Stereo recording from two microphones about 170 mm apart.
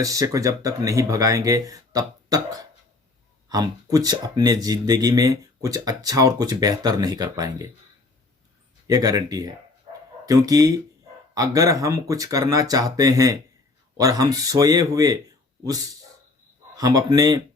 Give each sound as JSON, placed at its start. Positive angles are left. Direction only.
{"t": 0.0, "sound": "speech", "side_deg": -20}
{"t": 8.9, "sound": "speech", "side_deg": -20}